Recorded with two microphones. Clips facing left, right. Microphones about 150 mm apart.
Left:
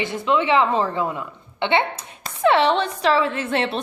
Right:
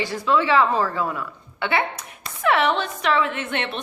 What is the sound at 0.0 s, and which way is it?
A woman's voice, 20° left (ahead or behind).